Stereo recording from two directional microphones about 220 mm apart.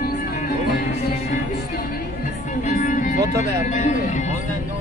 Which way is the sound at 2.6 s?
35° left (ahead or behind).